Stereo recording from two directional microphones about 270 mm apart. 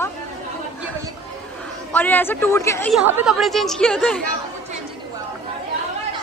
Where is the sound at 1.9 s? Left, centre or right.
Centre.